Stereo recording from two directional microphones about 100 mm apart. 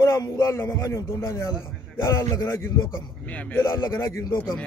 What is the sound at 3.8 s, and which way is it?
Speech, 35° left (ahead or behind).